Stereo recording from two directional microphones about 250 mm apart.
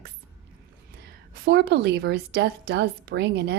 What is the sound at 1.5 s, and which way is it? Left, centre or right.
A woman's voice, right.